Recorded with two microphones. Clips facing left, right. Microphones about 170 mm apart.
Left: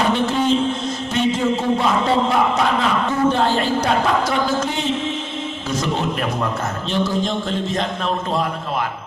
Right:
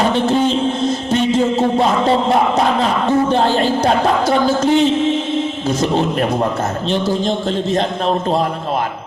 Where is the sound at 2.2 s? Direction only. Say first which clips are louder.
Right 4 dB; 35° right (ahead or behind).